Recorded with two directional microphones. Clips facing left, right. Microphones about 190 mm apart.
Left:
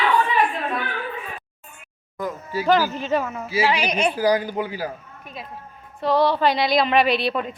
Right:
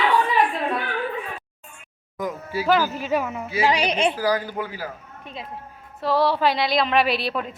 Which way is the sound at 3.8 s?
30° right (ahead or behind).